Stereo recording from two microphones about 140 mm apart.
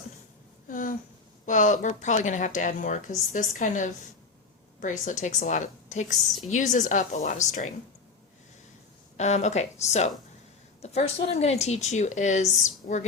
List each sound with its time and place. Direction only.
0.7 s a sound: 70° left (ahead or behind)
1.5 s speech: 60° left (ahead or behind)
9.1 s a woman's voice: 55° left (ahead or behind)